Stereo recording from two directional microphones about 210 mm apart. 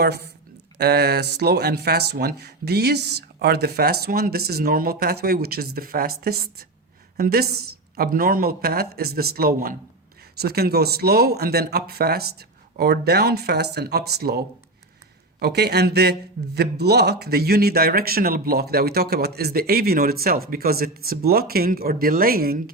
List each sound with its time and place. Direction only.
0.0 s speech: 50° right (ahead or behind)